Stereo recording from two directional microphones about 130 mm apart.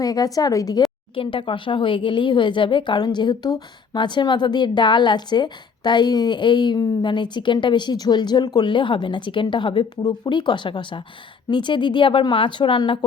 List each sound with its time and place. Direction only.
0.0 s speech: 30° left (ahead or behind)
1.1 s speech: 40° left (ahead or behind)